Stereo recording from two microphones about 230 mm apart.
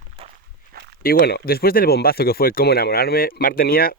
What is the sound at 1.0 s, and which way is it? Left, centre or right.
Speech, left.